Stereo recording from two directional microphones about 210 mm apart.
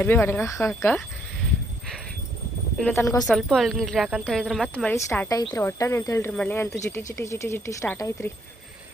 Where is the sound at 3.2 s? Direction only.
Centre (ahead or behind).